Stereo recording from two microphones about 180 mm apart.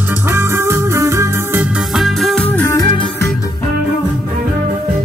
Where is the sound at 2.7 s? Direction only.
25° left (ahead or behind).